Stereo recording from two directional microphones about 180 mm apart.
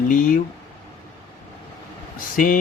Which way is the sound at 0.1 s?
45° left (ahead or behind).